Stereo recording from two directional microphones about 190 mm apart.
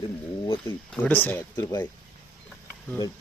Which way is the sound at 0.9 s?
10° left (ahead or behind).